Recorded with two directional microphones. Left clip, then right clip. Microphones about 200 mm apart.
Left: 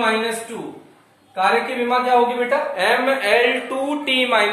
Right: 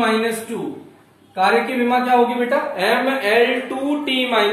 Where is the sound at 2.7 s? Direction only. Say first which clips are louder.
Even; 25° left (ahead or behind).